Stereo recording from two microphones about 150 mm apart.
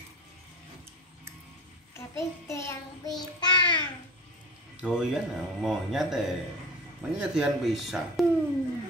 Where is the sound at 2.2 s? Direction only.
20° left (ahead or behind).